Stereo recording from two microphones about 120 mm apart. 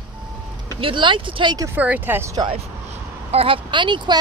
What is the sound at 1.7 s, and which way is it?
Speech, 15° right (ahead or behind).